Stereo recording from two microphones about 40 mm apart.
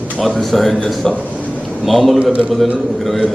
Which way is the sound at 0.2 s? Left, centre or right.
Centre.